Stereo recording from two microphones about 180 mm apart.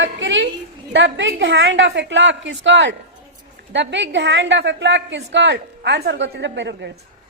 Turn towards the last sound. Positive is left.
turn(degrees=-75)  # may be behind; listen again after turning